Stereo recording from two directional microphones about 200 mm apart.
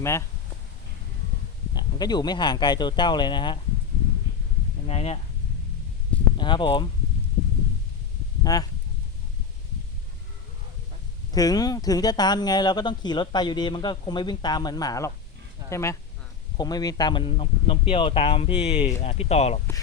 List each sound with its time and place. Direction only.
0.0 s speech: 15° left (ahead or behind)
1.7 s speech: 20° left (ahead or behind)
4.9 s speech: 30° left (ahead or behind)
6.3 s speech: 25° left (ahead or behind)
8.5 s speech: 20° left (ahead or behind)
11.3 s speech: 20° left (ahead or behind)